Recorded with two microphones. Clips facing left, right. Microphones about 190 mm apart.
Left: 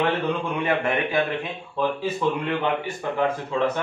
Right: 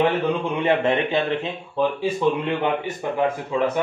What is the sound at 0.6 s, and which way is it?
Speech, 25° right (ahead or behind).